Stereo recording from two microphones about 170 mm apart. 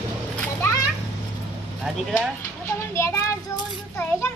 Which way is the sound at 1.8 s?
5° right (ahead or behind).